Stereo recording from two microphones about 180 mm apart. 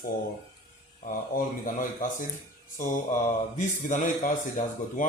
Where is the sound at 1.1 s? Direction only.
50° left (ahead or behind).